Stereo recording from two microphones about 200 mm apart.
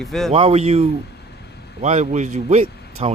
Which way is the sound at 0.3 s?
30° right (ahead or behind).